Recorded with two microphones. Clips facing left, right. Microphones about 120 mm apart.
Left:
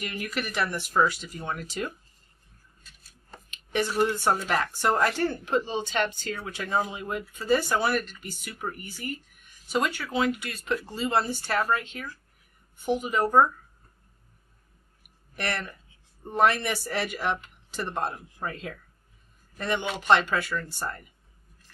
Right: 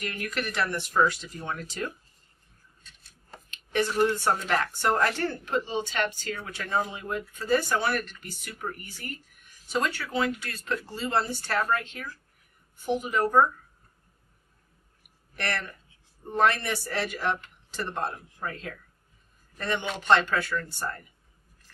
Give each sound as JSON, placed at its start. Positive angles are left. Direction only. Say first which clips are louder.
{"t": 0.0, "sound": "speech", "louder": "even", "side_deg": 5}
{"t": 2.8, "sound": "cutlery", "louder": "right 1 dB", "side_deg": 5}
{"t": 3.4, "sound": "a sound", "louder": "right 1 dB", "side_deg": 15}
{"t": 3.9, "sound": "speech", "louder": "left 1 dB", "side_deg": 5}
{"t": 5.5, "sound": "speech", "louder": "left 2 dB", "side_deg": 20}
{"t": 12.8, "sound": "speech", "louder": "left 1 dB", "side_deg": 20}
{"t": 15.3, "sound": "speech", "louder": "left 1 dB", "side_deg": 15}